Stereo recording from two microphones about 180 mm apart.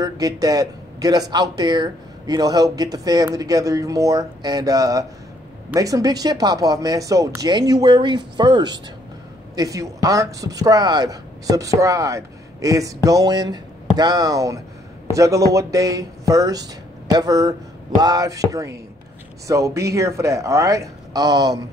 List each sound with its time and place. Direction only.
0.0 s speech: 20° right (ahead or behind)